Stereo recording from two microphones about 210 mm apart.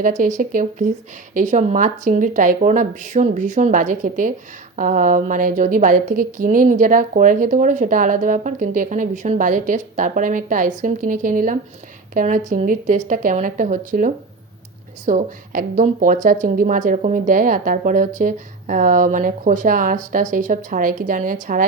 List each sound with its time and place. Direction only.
0.0 s a woman's voice: 35° right (ahead or behind)